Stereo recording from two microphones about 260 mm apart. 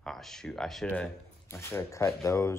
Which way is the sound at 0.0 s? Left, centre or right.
Centre.